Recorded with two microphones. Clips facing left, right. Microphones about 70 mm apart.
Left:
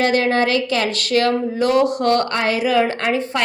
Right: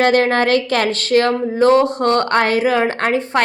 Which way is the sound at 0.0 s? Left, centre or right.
Right.